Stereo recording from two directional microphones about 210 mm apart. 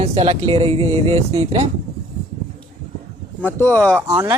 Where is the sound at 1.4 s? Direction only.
30° right (ahead or behind).